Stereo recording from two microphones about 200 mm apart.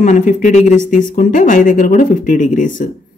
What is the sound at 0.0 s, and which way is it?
Speech, 40° left (ahead or behind).